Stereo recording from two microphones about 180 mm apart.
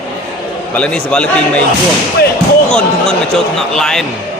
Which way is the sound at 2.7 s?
5° left (ahead or behind).